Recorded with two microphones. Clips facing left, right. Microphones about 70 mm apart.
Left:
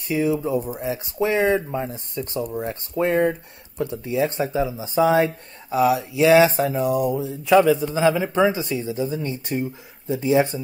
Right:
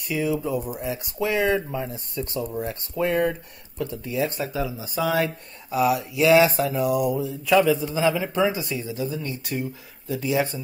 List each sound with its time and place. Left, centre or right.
0.1 s speech: left